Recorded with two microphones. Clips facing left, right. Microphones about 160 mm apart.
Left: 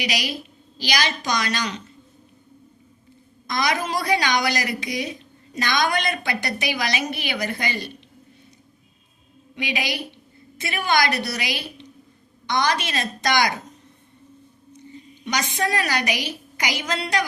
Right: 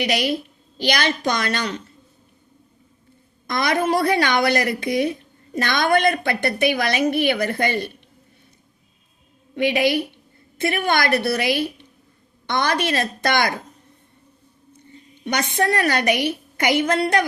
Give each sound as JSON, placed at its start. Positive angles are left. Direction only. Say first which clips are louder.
{"t": 0.0, "sound": "a woman's voice", "louder": "right 6 dB", "side_deg": -55}
{"t": 3.4, "sound": "a woman's voice", "louder": "right 4 dB", "side_deg": -55}
{"t": 9.6, "sound": "a woman's voice", "louder": "right 9 dB", "side_deg": -55}
{"t": 15.2, "sound": "a woman's voice", "louder": "right 3 dB", "side_deg": -55}